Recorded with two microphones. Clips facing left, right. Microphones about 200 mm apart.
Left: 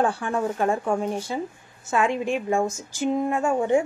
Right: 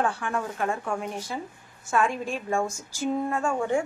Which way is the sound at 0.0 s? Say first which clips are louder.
Left 4 dB; 30° left (ahead or behind).